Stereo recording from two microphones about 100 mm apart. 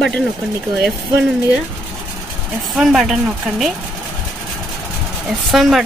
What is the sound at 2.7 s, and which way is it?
Speech, 5° right (ahead or behind).